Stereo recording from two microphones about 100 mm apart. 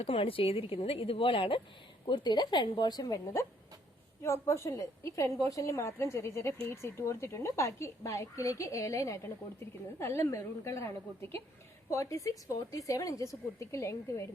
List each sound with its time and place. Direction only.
0.0 s a woman's voice: 70° left (ahead or behind)
2.0 s a woman's voice: 50° left (ahead or behind); by 14.3 s 30° left (ahead or behind)